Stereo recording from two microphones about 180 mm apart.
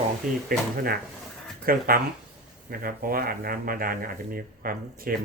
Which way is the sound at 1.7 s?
55° right (ahead or behind).